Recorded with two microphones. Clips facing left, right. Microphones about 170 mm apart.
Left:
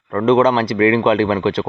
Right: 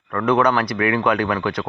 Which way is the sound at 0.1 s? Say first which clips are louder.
Left 4 dB; 25° left (ahead or behind).